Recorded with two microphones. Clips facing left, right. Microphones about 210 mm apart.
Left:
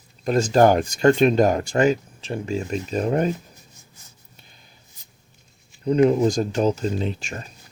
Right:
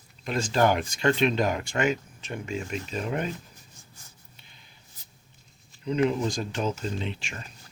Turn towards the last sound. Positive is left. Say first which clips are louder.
# left 7 dB
turn(degrees=40)  # may be behind; listen again after turning